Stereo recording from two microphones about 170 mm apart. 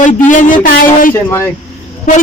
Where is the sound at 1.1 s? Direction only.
15° left (ahead or behind).